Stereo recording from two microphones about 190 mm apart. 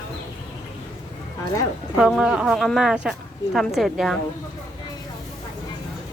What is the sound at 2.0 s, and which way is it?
A woman's voice, centre (ahead or behind).